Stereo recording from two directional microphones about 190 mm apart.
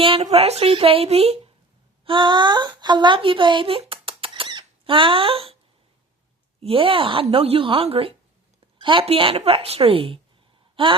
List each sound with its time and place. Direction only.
0.0 s a woman's voice: 30° right (ahead or behind)
6.6 s speech: 30° right (ahead or behind)